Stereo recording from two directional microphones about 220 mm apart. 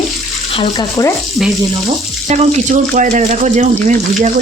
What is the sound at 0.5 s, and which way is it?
Speech, 20° left (ahead or behind).